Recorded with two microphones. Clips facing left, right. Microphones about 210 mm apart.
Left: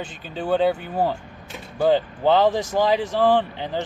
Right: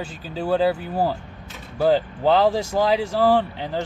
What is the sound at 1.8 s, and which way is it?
Speech, centre (ahead or behind).